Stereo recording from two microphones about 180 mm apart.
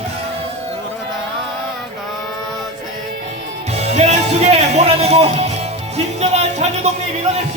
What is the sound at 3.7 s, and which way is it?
Music, 35° right (ahead or behind).